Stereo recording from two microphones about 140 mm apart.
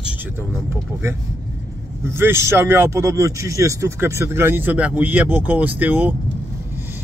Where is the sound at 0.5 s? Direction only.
15° right (ahead or behind).